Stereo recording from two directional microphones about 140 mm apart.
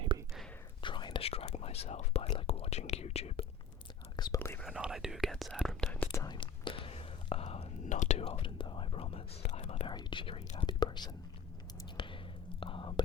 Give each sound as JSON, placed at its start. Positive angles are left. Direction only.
{"t": 0.8, "sound": "whispering", "side_deg": 35}
{"t": 4.4, "sound": "whispering", "side_deg": 15}
{"t": 4.6, "sound": "speech", "side_deg": -5}
{"t": 6.3, "sound": "whispering", "side_deg": 35}
{"t": 9.9, "sound": "speech", "side_deg": 35}
{"t": 10.5, "sound": "whispering", "side_deg": 30}